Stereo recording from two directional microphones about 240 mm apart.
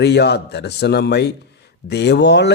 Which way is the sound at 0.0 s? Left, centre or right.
Left.